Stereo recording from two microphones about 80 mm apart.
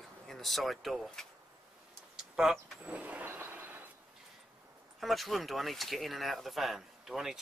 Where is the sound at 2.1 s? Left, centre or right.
Centre.